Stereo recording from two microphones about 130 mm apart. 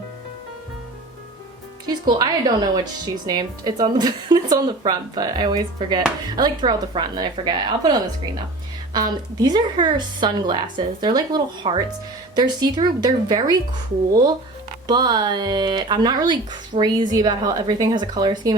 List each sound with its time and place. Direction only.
1.9 s speech: 30° right (ahead or behind)